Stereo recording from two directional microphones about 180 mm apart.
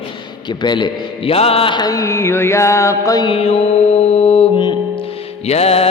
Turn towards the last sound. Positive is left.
turn(degrees=35)  # may be behind; listen again after turning